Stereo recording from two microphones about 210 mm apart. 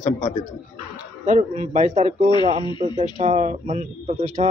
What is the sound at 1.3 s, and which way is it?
Speech, 35° right (ahead or behind).